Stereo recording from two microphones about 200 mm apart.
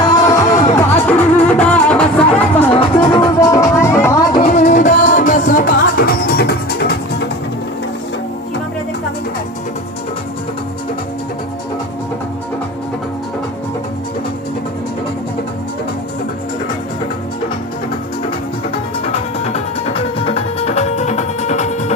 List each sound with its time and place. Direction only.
0.2 s music: 15° left (ahead or behind)
2.7 s music: 30° left (ahead or behind)
4.4 s music: 40° left (ahead or behind)
19.0 s music: 30° left (ahead or behind)